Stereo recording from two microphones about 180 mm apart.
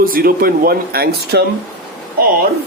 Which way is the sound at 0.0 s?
55° right (ahead or behind).